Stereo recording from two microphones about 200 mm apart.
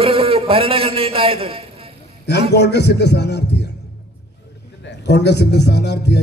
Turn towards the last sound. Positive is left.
turn(degrees=55)  # may be behind; listen again after turning